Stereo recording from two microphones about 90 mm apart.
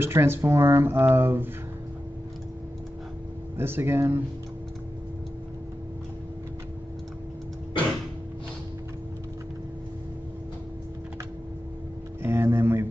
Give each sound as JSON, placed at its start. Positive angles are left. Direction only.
{"t": 0.0, "sound": "speech", "side_deg": -25}
{"t": 3.5, "sound": "speech", "side_deg": -25}
{"t": 12.2, "sound": "a sound", "side_deg": -25}